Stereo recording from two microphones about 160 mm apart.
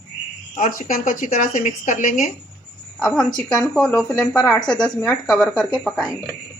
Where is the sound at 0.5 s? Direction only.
60° left (ahead or behind).